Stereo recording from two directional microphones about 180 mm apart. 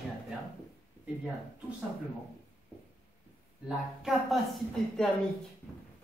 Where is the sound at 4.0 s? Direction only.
Centre (ahead or behind).